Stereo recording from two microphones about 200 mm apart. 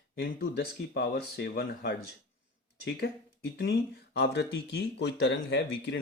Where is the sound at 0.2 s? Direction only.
50° left (ahead or behind).